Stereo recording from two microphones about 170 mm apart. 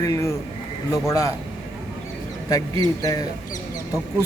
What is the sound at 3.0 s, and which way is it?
Speech, 20° left (ahead or behind).